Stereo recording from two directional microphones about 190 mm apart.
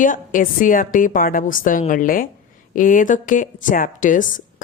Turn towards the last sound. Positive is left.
turn(degrees=45)  # may be behind; listen again after turning